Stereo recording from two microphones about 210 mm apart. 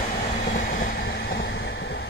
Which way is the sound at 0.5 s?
40° left (ahead or behind).